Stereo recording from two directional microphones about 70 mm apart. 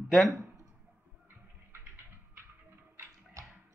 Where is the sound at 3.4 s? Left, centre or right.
Right.